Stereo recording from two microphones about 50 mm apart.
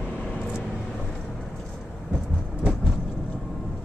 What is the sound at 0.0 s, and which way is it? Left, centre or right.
Vehicle, left.